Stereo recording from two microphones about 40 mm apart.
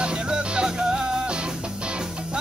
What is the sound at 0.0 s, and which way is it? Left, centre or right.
Music, right.